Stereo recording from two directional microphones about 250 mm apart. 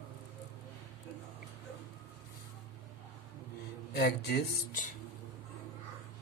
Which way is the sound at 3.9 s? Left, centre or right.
Left.